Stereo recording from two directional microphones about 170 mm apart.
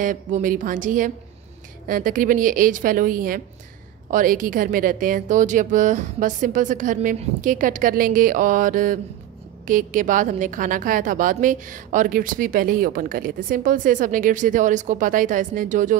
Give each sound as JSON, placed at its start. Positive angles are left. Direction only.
{"t": 0.0, "sound": "a woman's voice", "side_deg": -50}